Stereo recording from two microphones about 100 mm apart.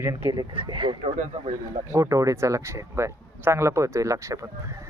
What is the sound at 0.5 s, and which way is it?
Speech, 55° right (ahead or behind).